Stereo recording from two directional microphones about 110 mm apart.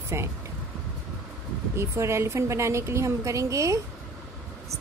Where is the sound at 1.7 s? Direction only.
25° right (ahead or behind).